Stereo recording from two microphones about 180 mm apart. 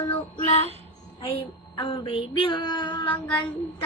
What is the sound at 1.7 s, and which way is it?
Child singing, 25° left (ahead or behind).